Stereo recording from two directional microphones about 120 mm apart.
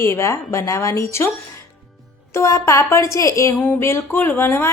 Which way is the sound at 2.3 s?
25° left (ahead or behind).